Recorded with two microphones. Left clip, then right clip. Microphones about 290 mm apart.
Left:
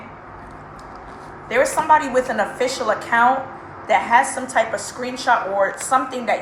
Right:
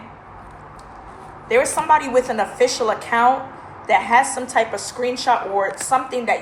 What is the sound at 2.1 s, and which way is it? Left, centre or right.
Speech, right.